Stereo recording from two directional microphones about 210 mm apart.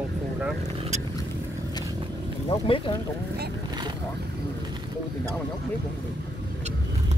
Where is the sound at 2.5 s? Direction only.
25° left (ahead or behind).